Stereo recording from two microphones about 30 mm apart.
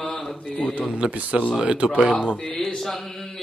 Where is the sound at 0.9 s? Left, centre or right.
Right.